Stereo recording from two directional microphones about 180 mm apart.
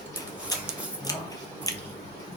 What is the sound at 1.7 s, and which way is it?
Squish, 20° left (ahead or behind).